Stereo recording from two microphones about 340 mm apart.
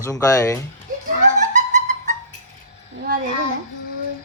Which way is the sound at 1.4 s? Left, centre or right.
Right.